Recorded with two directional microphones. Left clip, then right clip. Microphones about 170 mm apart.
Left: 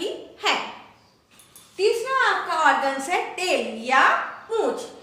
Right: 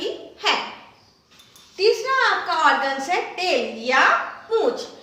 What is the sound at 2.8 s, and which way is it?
A woman's voice, 10° left (ahead or behind).